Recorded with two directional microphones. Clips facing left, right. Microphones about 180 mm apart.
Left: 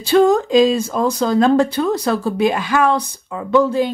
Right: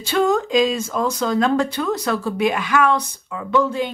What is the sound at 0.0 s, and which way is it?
Speech, 35° left (ahead or behind).